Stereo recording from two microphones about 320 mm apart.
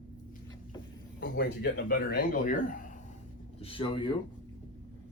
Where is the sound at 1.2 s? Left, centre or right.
Left.